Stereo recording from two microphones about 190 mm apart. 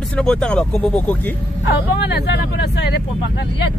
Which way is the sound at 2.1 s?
65° left (ahead or behind).